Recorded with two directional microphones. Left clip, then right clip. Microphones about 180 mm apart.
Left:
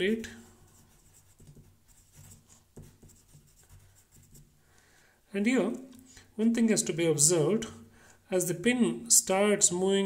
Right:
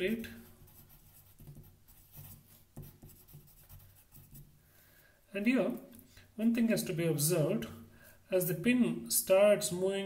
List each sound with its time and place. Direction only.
5.3 s speech: 40° left (ahead or behind)